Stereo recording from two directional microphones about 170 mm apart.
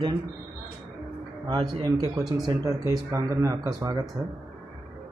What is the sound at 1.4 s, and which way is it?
Speech, 25° right (ahead or behind).